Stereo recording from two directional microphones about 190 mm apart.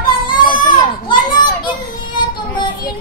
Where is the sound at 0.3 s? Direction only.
25° left (ahead or behind).